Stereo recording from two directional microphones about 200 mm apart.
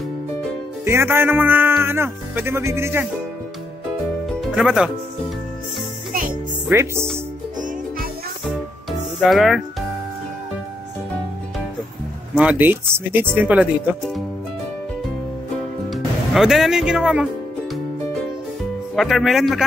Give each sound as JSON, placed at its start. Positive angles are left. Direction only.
{"t": 0.8, "sound": "speech", "side_deg": -10}
{"t": 4.3, "sound": "music", "side_deg": 0}
{"t": 6.7, "sound": "speech", "side_deg": -15}
{"t": 9.2, "sound": "speech", "side_deg": 0}
{"t": 12.4, "sound": "speech", "side_deg": -10}
{"t": 15.9, "sound": "speech", "side_deg": 0}
{"t": 18.9, "sound": "speech", "side_deg": 0}